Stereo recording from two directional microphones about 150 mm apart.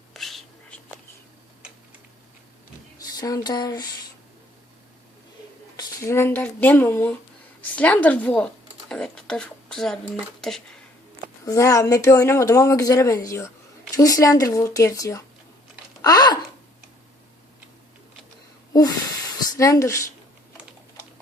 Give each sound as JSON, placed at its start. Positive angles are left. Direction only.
{"t": 0.1, "sound": "whispering", "side_deg": 0}
{"t": 3.0, "sound": "a sound", "side_deg": 25}
{"t": 5.7, "sound": "a woman's voice", "side_deg": 20}
{"t": 11.4, "sound": "speech", "side_deg": 20}
{"t": 16.0, "sound": "typing", "side_deg": 25}
{"t": 19.5, "sound": "speech", "side_deg": 20}